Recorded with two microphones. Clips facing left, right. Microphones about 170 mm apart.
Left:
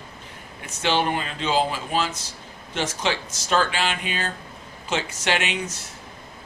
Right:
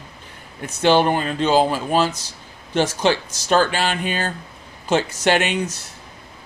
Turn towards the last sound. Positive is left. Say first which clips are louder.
# right 6 dB
turn(degrees=-45)  # may be behind; listen again after turning